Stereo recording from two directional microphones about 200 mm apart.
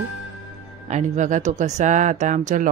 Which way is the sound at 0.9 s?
35° right (ahead or behind).